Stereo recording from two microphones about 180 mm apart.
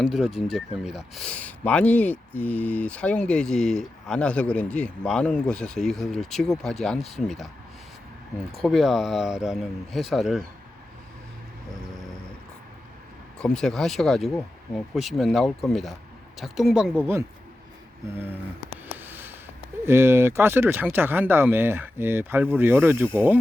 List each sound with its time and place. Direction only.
0.0 s speech: centre (ahead or behind)
8.6 s speech: centre (ahead or behind)
13.4 s speech: 5° left (ahead or behind)
18.9 s a sound: 10° right (ahead or behind)
19.8 s speech: 15° right (ahead or behind)